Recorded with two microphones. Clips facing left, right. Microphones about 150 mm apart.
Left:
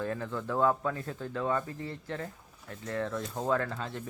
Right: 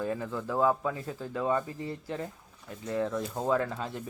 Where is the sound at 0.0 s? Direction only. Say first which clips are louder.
Right 1 dB; 10° right (ahead or behind).